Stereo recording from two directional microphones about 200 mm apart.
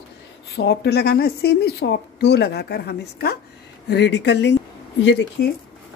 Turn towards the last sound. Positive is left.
turn(degrees=65)  # may be behind; listen again after turning